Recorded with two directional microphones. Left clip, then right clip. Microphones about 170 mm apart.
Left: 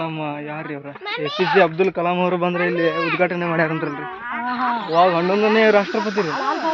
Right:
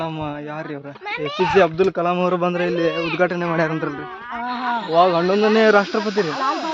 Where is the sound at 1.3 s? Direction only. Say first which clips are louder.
Right 1 dB; 50° left (ahead or behind).